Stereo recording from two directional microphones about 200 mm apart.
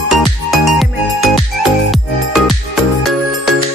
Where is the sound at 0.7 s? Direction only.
Centre (ahead or behind).